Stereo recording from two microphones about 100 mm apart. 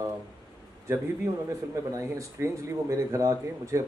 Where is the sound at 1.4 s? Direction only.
30° right (ahead or behind).